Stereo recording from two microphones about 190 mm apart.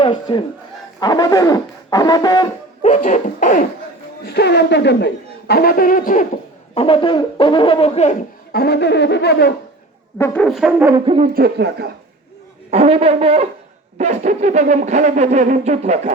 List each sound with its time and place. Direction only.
0.0 s brass instrument: 25° left (ahead or behind)
2.8 s a sound: 35° left (ahead or behind)
4.2 s speech: 60° left (ahead or behind)
6.7 s brass instrument: 30° left (ahead or behind)
8.5 s speech: 60° left (ahead or behind)
10.2 s french horn: 10° left (ahead or behind); by 10.9 s 10° right (ahead or behind)
10.9 s hoot: 30° right (ahead or behind)
11.3 s speech: 60° right (ahead or behind)
12.7 s a sound: 30° right (ahead or behind)